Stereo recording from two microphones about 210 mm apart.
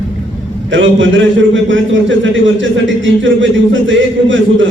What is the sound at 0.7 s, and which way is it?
A man's voice, 65° right (ahead or behind).